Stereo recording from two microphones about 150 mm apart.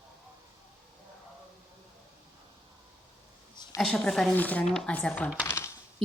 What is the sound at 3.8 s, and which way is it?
Speech, 5° left (ahead or behind).